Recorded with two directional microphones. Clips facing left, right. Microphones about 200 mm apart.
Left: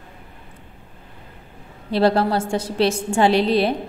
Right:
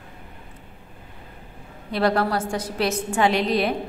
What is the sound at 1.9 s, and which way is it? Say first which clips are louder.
A woman's voice: left 4 dB; 30° left (ahead or behind).